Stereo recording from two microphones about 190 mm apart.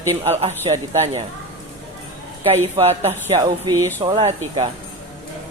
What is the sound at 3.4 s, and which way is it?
Speech, 20° right (ahead or behind).